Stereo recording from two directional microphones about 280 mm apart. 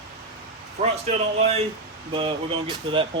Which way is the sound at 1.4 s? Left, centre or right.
Right.